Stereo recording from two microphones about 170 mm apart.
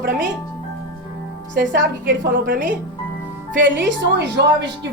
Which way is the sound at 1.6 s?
55° right (ahead or behind).